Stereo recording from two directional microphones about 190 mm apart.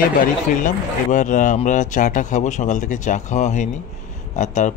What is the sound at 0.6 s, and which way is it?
Speech, 40° left (ahead or behind).